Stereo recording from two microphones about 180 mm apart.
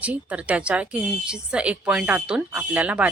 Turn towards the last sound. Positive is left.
turn(degrees=-10)  # may be behind; listen again after turning